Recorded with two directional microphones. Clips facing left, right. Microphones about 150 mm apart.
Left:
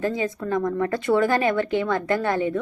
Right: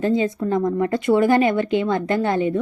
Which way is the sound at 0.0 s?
25° right (ahead or behind).